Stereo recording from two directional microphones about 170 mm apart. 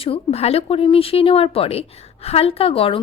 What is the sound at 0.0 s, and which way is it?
A woman's voice, 35° left (ahead or behind).